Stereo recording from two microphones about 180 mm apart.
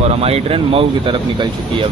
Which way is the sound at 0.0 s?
35° right (ahead or behind).